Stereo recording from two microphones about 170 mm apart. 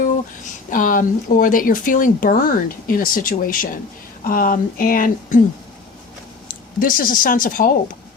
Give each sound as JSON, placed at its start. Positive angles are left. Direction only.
{"t": 0.7, "sound": "speech", "side_deg": 50}
{"t": 6.5, "sound": "speech", "side_deg": 55}